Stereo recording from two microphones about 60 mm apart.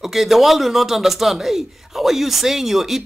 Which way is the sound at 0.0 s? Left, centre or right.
Centre.